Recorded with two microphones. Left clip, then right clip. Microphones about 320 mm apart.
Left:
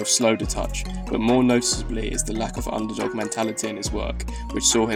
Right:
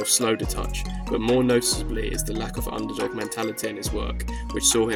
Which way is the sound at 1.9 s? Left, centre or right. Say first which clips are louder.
Left 2 dB; right.